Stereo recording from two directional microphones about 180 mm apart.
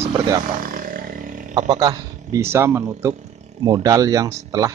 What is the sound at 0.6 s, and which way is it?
Roaring cats, 50° right (ahead or behind).